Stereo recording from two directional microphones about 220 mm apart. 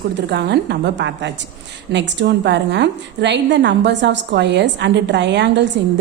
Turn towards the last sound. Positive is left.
turn(degrees=-50)  # may be behind; listen again after turning